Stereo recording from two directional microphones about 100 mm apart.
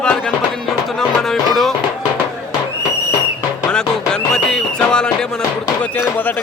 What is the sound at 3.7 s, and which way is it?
Music, 10° left (ahead or behind).